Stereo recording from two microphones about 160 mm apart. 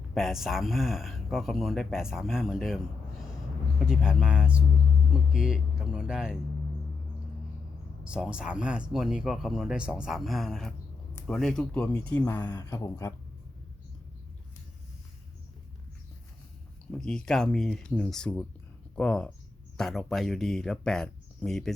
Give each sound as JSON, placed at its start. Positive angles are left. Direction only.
{"t": 0.1, "sound": "speech", "side_deg": 0}
{"t": 8.0, "sound": "speech", "side_deg": -5}
{"t": 17.0, "sound": "speech", "side_deg": 5}